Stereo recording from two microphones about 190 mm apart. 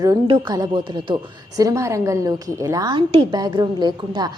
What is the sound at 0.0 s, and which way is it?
A woman's voice, 20° right (ahead or behind).